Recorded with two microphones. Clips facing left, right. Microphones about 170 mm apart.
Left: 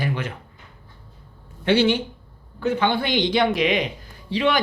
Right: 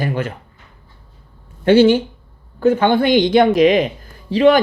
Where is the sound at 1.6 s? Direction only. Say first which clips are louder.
Right 8 dB; 45° right (ahead or behind).